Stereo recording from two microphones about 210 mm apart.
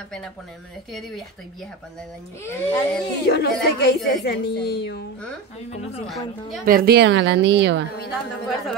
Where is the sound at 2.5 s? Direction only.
10° left (ahead or behind).